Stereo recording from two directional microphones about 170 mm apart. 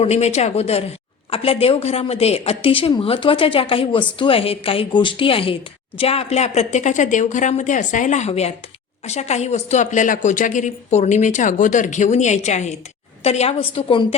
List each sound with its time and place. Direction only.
0.0 s a woman's voice: 40° left (ahead or behind)